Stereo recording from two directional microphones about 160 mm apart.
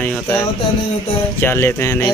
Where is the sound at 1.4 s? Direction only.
15° left (ahead or behind).